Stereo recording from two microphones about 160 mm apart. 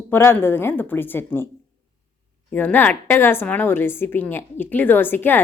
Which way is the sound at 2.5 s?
10° left (ahead or behind).